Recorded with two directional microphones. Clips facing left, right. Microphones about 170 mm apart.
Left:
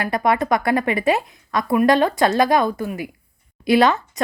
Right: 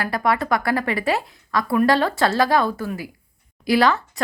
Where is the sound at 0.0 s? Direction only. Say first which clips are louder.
Left 2 dB; 20° left (ahead or behind).